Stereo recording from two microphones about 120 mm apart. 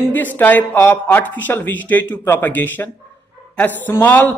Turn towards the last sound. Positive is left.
turn(degrees=15)  # may be behind; listen again after turning